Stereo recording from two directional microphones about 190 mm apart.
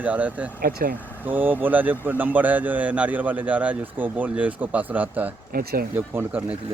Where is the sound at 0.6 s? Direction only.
50° right (ahead or behind).